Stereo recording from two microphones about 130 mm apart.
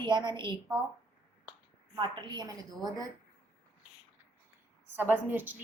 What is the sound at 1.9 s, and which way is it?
A woman's voice, 40° right (ahead or behind).